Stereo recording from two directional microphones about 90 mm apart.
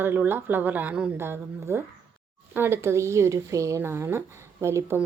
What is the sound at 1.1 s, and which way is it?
A woman's voice, 25° right (ahead or behind).